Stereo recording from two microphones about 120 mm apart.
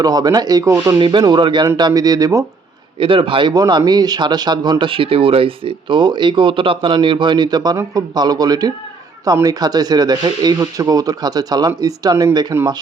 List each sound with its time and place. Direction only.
0.0 s speech: 35° right (ahead or behind)
0.9 s speech: 40° right (ahead or behind)
3.0 s speech: 45° right (ahead or behind)